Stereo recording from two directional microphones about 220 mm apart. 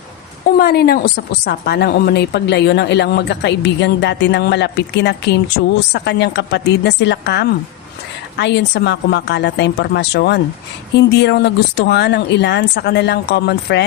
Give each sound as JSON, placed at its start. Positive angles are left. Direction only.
{"t": 0.6, "sound": "a woman's voice", "side_deg": 45}